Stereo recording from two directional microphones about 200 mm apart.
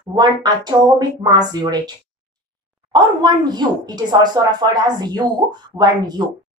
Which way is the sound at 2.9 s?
20° right (ahead or behind).